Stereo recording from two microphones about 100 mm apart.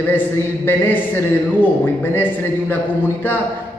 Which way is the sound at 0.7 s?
20° left (ahead or behind).